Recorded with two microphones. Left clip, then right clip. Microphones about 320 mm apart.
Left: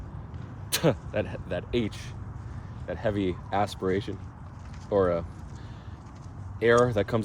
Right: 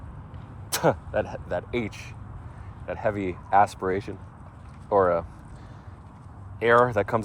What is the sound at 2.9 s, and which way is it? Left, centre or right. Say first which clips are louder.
Speech: right 1 dB; centre.